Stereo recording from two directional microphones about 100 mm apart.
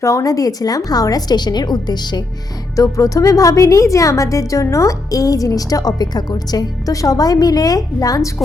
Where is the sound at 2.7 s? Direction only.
35° left (ahead or behind).